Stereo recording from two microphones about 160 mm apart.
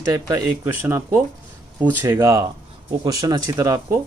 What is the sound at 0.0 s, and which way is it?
Speech, 20° right (ahead or behind).